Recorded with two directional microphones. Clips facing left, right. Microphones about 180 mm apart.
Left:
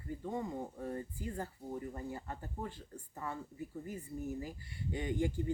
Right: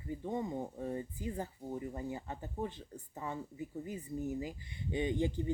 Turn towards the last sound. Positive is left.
turn(degrees=-20)  # may be behind; listen again after turning